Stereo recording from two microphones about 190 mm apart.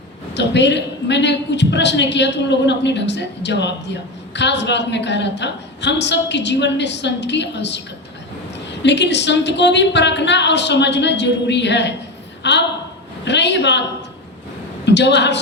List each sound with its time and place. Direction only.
0.3 s a woman's voice: 65° left (ahead or behind)
8.8 s a woman's voice: 65° left (ahead or behind)
14.8 s a woman's voice: 65° left (ahead or behind)